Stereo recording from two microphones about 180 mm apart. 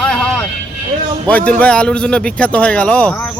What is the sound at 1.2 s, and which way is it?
Speech, 5° left (ahead or behind).